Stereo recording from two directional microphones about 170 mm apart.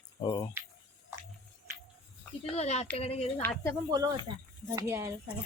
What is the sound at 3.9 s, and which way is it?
Speech, 20° right (ahead or behind).